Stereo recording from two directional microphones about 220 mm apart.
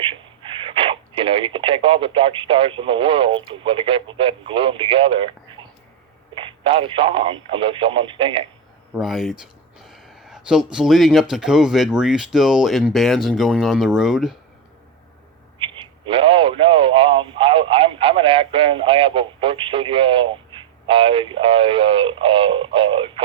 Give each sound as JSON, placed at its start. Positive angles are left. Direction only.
{"t": 0.0, "sound": "speech", "side_deg": -25}
{"t": 8.9, "sound": "speech", "side_deg": 0}
{"t": 15.5, "sound": "a man's voice", "side_deg": -20}